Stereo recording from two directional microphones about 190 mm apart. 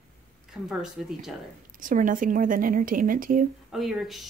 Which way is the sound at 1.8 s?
45° right (ahead or behind).